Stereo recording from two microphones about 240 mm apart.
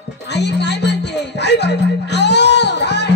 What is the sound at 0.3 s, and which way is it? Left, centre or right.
Music, left.